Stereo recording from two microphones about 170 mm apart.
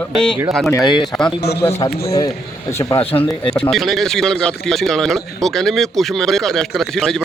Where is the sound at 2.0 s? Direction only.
20° left (ahead or behind).